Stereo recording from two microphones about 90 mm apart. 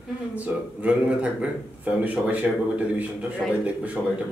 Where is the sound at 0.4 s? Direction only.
15° right (ahead or behind).